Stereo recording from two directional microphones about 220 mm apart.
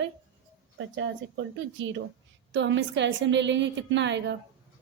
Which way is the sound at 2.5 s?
55° right (ahead or behind).